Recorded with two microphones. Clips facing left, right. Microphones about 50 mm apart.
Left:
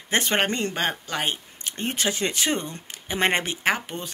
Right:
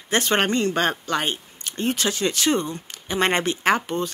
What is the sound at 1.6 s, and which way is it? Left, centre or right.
Speech, left.